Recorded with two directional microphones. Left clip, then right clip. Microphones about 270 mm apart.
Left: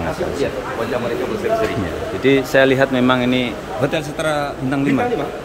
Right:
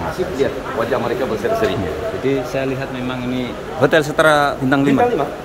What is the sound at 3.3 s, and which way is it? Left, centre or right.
Speech, centre.